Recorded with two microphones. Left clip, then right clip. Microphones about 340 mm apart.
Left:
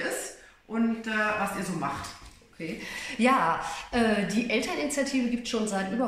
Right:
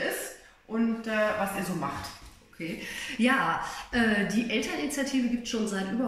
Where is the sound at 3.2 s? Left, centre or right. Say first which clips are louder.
Left 2 dB; centre.